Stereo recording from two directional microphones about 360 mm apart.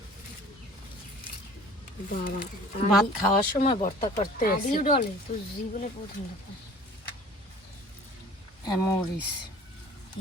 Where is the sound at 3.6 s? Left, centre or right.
Centre.